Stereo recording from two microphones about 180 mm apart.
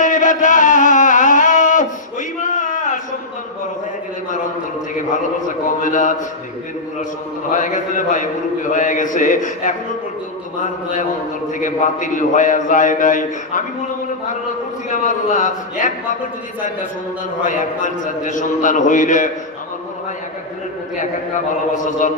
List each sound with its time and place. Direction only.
0.0 s music: 45° left (ahead or behind)
5.7 s a man's voice: 45° left (ahead or behind)
7.5 s a man's voice: 45° left (ahead or behind)
14.9 s a man's voice: 45° left (ahead or behind)
17.5 s a man's voice: 45° left (ahead or behind)
21.8 s a man's voice: 45° left (ahead or behind)